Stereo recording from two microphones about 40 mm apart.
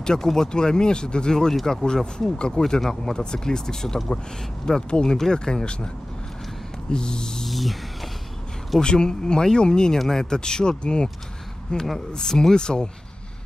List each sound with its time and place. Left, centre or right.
0.0 s speech: centre
6.9 s speech: left
7.4 s a sound: centre
8.8 s speech: centre